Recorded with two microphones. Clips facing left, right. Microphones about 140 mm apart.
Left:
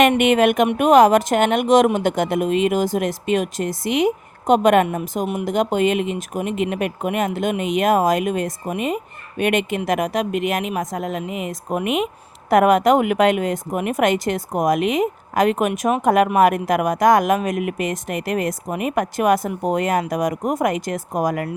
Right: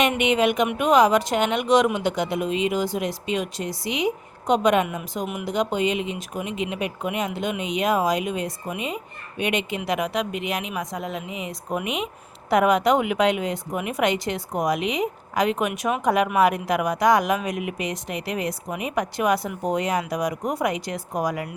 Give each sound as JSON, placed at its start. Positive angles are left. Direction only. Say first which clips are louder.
{"t": 0.2, "sound": "a woman's voice", "louder": "left 5 dB", "side_deg": 55}
{"t": 5.2, "sound": "speech", "louder": "left 5 dB", "side_deg": 35}
{"t": 5.5, "sound": "a woman's voice", "louder": "left 4 dB", "side_deg": 50}